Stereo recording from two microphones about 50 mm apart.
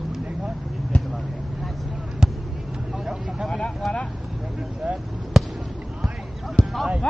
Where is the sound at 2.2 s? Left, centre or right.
Centre.